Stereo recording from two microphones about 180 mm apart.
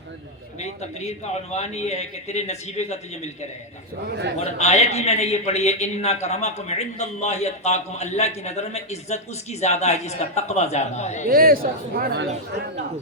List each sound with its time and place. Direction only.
0.6 s a man's voice: 40° left (ahead or behind)
4.1 s a man's voice: 70° right (ahead or behind)
4.4 s a man's voice: 35° left (ahead or behind)
11.3 s speech: 55° right (ahead or behind)